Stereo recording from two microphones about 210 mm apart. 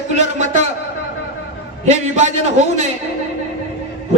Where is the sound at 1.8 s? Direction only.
35° right (ahead or behind).